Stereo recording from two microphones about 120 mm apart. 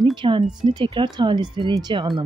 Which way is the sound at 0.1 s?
40° right (ahead or behind).